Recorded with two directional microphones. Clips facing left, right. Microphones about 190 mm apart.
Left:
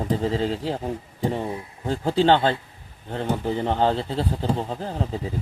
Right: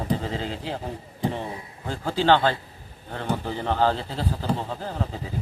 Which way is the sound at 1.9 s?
30° left (ahead or behind).